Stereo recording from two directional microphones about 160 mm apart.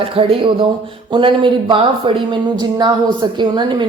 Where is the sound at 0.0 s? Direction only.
35° right (ahead or behind).